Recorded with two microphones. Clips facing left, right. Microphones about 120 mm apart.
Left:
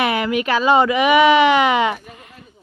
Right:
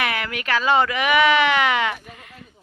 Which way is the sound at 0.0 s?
20° left (ahead or behind).